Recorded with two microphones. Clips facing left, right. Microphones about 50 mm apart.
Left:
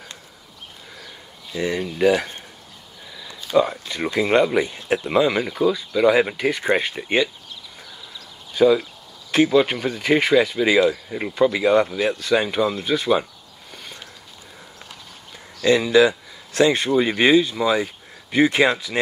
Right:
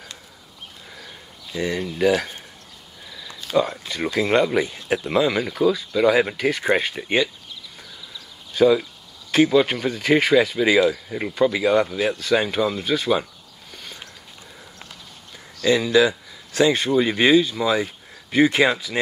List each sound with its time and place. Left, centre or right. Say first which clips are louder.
0.9 s a sound: even; centre
1.7 s speech: left 1 dB; centre
3.1 s a sound: left 2 dB; centre
3.9 s speech: left 1 dB; centre
8.5 s speech: even; centre
15.8 s speech: left 2 dB; centre
17.3 s speech: even; left
17.6 s speech: left 1 dB; centre